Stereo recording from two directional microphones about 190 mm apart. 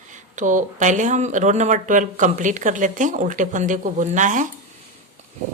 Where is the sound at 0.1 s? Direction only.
40° right (ahead or behind).